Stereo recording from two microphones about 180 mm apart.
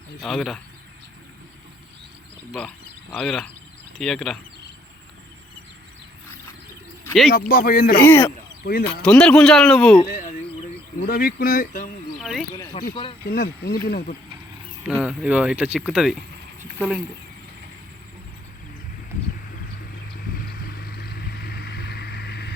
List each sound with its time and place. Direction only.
0.2 s a man's voice: centre (ahead or behind)
2.5 s speech: 5° left (ahead or behind)
7.3 s speech: 55° left (ahead or behind)
8.0 s speech: 10° left (ahead or behind)
8.6 s speech: 55° left (ahead or behind)
9.0 s a man's voice: 5° left (ahead or behind)
10.1 s a sound: 45° left (ahead or behind)
11.0 s speech: 55° left (ahead or behind)
12.2 s speech: centre (ahead or behind)
12.9 s speech: 30° left (ahead or behind)
13.2 s speech: 55° left (ahead or behind)
14.8 s speech: 5° right (ahead or behind)
20.3 s vehicle: 55° left (ahead or behind)